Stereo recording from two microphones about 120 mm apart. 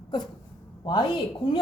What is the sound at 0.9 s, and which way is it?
Speech, 35° left (ahead or behind).